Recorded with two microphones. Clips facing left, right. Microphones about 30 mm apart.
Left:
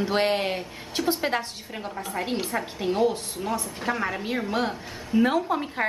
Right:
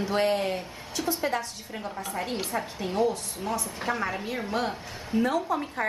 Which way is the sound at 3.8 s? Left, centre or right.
Centre.